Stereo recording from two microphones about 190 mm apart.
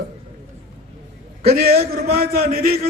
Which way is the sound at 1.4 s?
50° right (ahead or behind).